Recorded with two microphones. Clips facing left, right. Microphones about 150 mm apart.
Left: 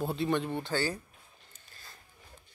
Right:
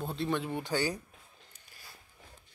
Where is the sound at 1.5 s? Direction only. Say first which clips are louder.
Left 1 dB; 10° right (ahead or behind).